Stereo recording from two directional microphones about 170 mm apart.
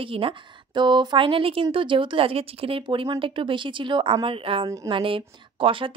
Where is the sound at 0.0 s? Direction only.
30° right (ahead or behind).